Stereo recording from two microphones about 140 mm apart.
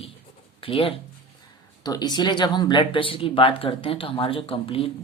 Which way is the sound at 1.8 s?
30° left (ahead or behind).